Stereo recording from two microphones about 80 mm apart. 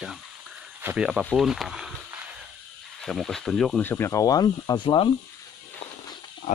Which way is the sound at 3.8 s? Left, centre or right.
Left.